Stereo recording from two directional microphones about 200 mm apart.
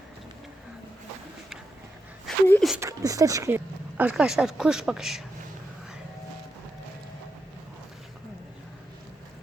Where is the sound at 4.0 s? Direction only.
5° right (ahead or behind).